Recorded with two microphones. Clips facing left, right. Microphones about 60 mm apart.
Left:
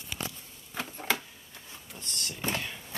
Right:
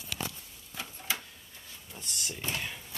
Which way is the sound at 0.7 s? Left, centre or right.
Left.